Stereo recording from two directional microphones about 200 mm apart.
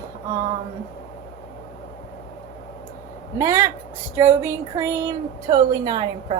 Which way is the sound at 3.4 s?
15° right (ahead or behind).